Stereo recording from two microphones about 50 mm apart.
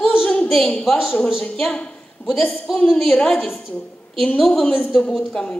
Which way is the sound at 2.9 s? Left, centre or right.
Centre.